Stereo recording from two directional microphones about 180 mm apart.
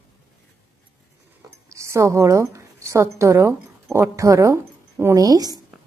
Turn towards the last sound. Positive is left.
turn(degrees=-20)  # may be behind; listen again after turning